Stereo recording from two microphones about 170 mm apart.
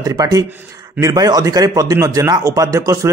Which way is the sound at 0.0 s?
20° right (ahead or behind).